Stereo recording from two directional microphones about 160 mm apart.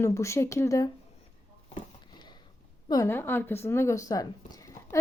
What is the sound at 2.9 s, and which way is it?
A woman's voice, 20° left (ahead or behind).